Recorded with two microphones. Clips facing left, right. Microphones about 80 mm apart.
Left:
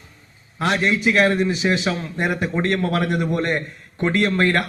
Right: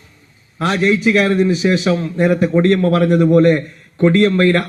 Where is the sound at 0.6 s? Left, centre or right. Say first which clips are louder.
Right 5 dB; left.